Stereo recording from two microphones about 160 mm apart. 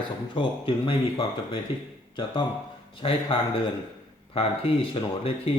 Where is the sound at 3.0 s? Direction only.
35° left (ahead or behind).